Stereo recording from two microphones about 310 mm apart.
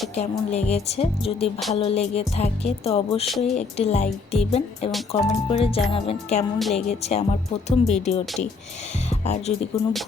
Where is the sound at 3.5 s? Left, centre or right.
Left.